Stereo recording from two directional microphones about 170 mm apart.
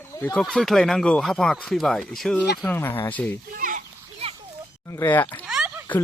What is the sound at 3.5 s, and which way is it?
Children playing, 50° right (ahead or behind).